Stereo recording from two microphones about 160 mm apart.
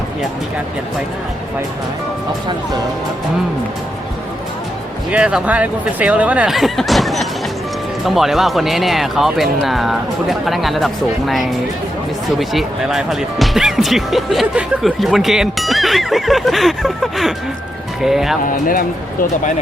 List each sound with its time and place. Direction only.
5.1 s speech: 5° right (ahead or behind)
18.4 s speech: 60° left (ahead or behind)